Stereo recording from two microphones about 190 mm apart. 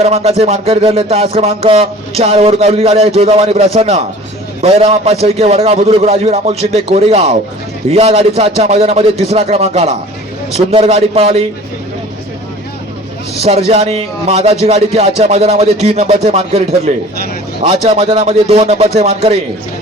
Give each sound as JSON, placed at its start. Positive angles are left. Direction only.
{"t": 0.0, "sound": "music", "side_deg": -35}
{"t": 13.4, "sound": "music", "side_deg": -35}